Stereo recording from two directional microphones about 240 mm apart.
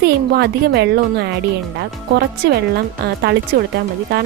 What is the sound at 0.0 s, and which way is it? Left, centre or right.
Speech, right.